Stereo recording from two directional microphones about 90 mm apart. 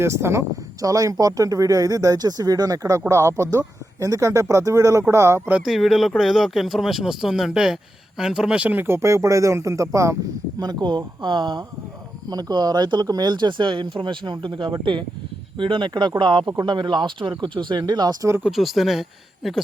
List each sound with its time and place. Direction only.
0.0 s speech: 30° right (ahead or behind)
5.6 s speech: centre (ahead or behind); by 10.2 s 35° right (ahead or behind)
10.6 s speech: 50° right (ahead or behind)
18.5 s speech: centre (ahead or behind)